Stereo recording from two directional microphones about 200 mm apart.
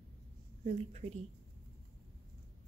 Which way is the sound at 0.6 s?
30° right (ahead or behind).